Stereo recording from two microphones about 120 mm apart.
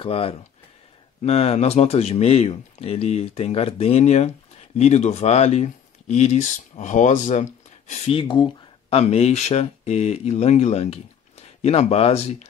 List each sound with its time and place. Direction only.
0.0 s speech: 50° left (ahead or behind); by 7.9 s 85° left
8.1 s speech: 45° left (ahead or behind)
8.9 s speech: 60° left (ahead or behind)